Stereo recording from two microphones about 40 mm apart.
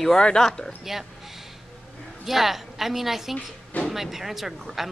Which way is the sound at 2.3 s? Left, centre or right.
Centre.